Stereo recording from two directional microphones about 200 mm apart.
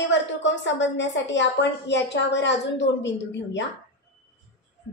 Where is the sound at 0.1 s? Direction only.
65° left (ahead or behind).